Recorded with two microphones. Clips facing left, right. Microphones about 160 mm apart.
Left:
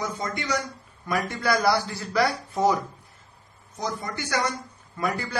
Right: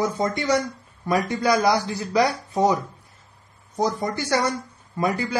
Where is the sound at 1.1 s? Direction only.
20° right (ahead or behind).